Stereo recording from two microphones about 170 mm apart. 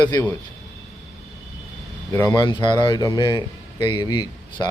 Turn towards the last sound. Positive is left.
turn(degrees=25)  # may be behind; listen again after turning